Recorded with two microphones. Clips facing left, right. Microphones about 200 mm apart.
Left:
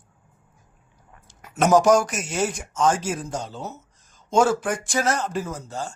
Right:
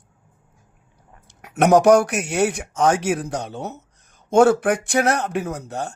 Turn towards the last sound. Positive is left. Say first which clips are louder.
# right 4 dB
turn(degrees=-65)  # may be behind; listen again after turning